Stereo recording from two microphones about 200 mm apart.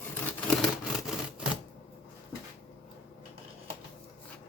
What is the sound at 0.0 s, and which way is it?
Vehicle, 10° left (ahead or behind).